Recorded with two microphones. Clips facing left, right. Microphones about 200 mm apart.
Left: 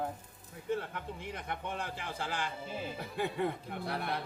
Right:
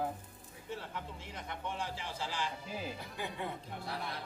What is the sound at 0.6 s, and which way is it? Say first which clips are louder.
Speech: left 7 dB; 55° left (ahead or behind).